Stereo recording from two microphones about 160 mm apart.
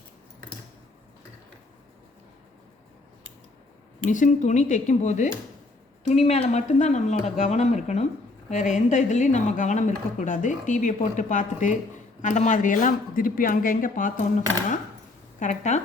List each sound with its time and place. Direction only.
4.0 s speech: 50° left (ahead or behind)
15.4 s speech: 50° left (ahead or behind)